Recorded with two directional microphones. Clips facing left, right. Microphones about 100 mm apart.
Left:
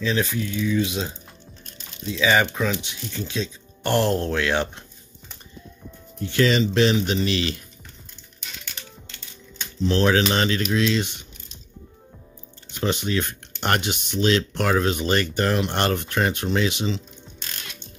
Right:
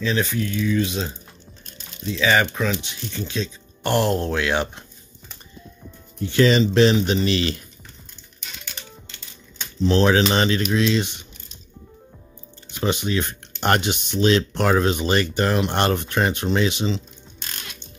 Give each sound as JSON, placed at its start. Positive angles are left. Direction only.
{"t": 0.0, "sound": "speech", "side_deg": 0}
{"t": 2.1, "sound": "speech", "side_deg": 5}
{"t": 3.8, "sound": "speech", "side_deg": -10}
{"t": 6.3, "sound": "speech", "side_deg": -30}
{"t": 9.8, "sound": "speech", "side_deg": -25}
{"t": 12.8, "sound": "speech", "side_deg": -15}
{"t": 13.6, "sound": "speech", "side_deg": -30}